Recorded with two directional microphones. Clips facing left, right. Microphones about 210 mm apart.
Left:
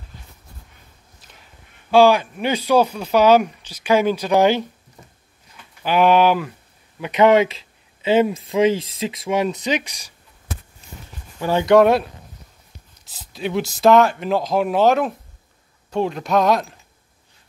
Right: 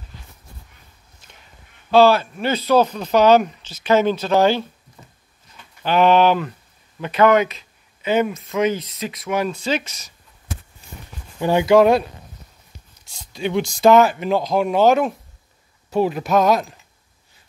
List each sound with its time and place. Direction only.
1.9 s speech: 15° left (ahead or behind)
5.8 s speech: 10° left (ahead or behind)
7.0 s speech: 20° left (ahead or behind)
11.3 s speech: 15° right (ahead or behind)
11.6 s speech: centre (ahead or behind)